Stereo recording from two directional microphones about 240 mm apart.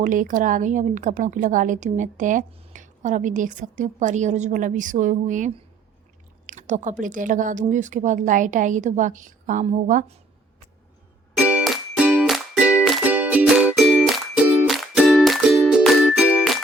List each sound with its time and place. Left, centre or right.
0.0 s a woman's voice: right
6.4 s chewing: right
7.0 s a woman's voice: right
11.3 s music: centre